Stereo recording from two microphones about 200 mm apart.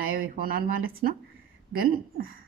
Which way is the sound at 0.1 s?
45° right (ahead or behind).